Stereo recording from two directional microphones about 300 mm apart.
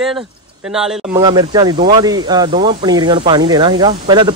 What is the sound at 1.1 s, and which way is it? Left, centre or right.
Speech, centre.